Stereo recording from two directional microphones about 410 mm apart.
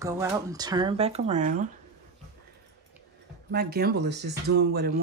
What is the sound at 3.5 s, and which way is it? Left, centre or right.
Speech, right.